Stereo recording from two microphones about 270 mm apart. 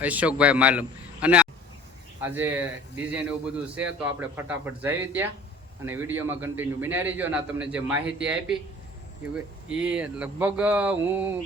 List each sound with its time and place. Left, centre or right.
0.0 s a man's voice: centre